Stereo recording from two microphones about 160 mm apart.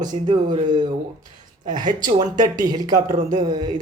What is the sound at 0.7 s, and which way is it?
Speech, 25° right (ahead or behind).